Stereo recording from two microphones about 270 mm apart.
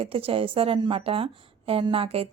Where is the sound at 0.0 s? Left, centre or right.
Right.